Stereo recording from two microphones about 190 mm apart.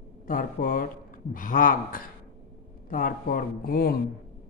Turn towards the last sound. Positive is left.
turn(degrees=50)  # may be behind; listen again after turning